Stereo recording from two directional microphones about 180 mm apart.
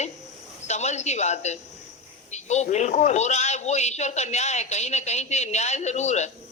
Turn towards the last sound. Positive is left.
turn(degrees=40)  # may be behind; listen again after turning